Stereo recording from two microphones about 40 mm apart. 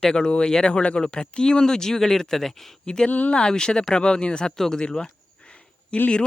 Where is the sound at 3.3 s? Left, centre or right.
Centre.